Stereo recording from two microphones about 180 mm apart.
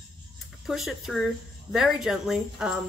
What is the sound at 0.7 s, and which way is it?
A woman's voice, centre (ahead or behind).